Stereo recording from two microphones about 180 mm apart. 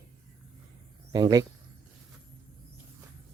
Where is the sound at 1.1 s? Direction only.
20° right (ahead or behind).